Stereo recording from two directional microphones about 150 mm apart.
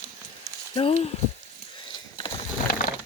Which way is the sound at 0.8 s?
40° left (ahead or behind).